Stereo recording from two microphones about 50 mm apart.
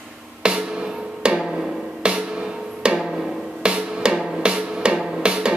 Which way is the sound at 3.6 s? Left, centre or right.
Centre.